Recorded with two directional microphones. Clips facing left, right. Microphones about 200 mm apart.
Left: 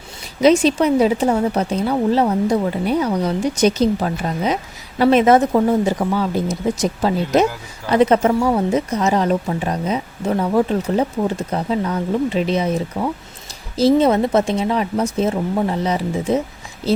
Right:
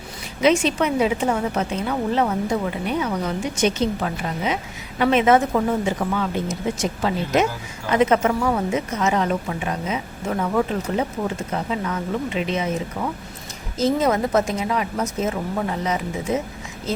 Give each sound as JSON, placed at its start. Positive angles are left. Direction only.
{"t": 0.4, "sound": "a woman's voice", "side_deg": 35}